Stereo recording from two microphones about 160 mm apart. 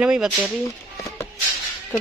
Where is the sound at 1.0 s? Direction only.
20° left (ahead or behind).